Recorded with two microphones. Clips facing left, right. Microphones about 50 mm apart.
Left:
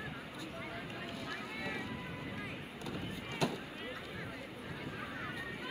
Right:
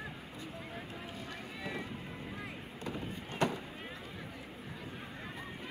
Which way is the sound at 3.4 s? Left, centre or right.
Right.